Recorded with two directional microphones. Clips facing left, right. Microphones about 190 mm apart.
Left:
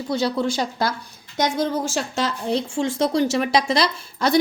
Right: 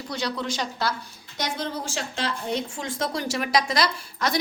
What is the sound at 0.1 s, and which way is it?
Speech, 30° left (ahead or behind).